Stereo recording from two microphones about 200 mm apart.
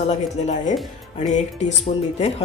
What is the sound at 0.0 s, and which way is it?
Speech, 35° left (ahead or behind).